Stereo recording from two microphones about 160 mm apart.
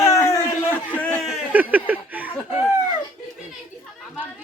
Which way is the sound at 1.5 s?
10° right (ahead or behind).